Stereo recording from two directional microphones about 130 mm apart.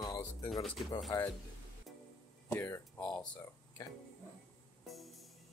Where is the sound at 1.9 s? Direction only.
Centre (ahead or behind).